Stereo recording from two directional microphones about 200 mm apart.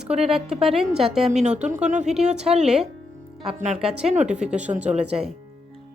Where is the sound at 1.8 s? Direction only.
35° right (ahead or behind).